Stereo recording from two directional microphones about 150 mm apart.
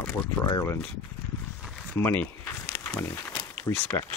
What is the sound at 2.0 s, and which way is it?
Speech, 15° left (ahead or behind).